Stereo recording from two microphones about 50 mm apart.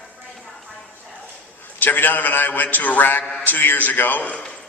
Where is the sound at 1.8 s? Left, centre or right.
Left.